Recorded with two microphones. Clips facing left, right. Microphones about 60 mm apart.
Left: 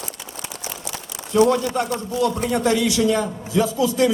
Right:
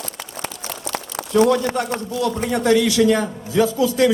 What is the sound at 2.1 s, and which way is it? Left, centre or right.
Speech, left.